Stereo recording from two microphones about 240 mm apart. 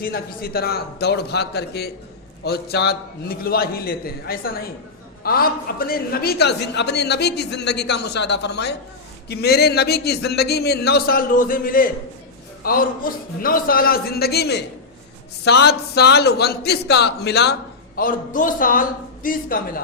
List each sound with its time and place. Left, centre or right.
0.0 s speech: left
13.0 s speech: left